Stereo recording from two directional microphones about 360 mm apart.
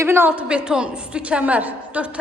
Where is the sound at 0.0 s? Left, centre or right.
Centre.